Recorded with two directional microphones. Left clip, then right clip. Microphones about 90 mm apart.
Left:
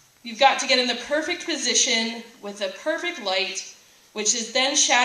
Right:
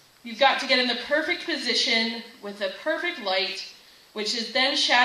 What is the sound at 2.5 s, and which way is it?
Speech, 35° left (ahead or behind).